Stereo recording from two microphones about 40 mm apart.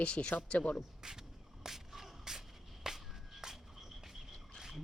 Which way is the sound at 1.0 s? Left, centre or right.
Centre.